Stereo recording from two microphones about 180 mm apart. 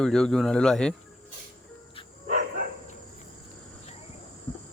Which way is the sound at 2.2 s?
45° right (ahead or behind).